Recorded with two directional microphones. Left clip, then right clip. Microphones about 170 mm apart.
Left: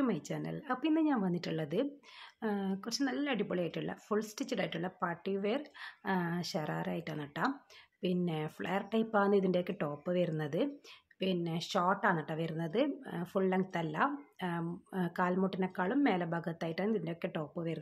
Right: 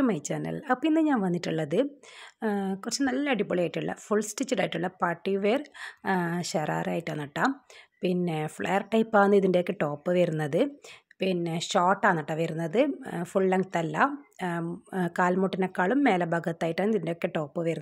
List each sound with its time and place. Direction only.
0.0 s a woman's voice: 50° right (ahead or behind)